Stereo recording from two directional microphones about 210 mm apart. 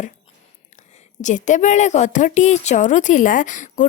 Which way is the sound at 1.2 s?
35° left (ahead or behind).